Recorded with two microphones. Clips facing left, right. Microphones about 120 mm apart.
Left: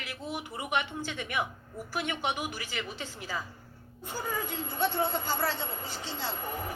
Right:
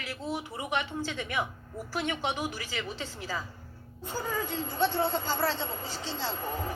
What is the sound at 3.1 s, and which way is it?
Speech, 40° right (ahead or behind).